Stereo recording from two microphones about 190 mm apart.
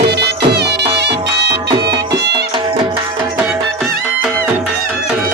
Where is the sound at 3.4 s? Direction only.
5° right (ahead or behind).